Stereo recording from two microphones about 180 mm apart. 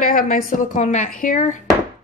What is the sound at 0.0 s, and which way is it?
Speech, 50° left (ahead or behind).